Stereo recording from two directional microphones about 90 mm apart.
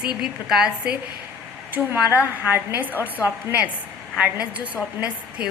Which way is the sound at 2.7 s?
20° right (ahead or behind).